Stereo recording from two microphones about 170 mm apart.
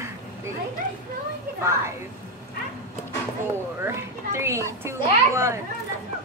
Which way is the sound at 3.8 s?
15° right (ahead or behind).